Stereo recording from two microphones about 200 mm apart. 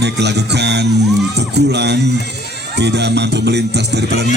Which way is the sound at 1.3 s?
55° right (ahead or behind).